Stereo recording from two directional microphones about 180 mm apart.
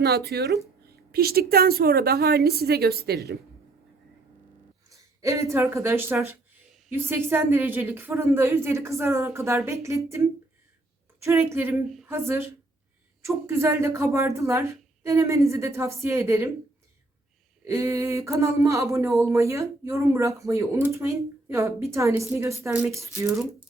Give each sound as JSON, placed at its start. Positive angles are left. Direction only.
{"t": 0.0, "sound": "a woman's voice", "side_deg": -65}
{"t": 4.9, "sound": "a woman's voice", "side_deg": -15}
{"t": 11.2, "sound": "speech", "side_deg": -15}
{"t": 17.7, "sound": "speech", "side_deg": -15}
{"t": 23.0, "sound": "speech", "side_deg": -15}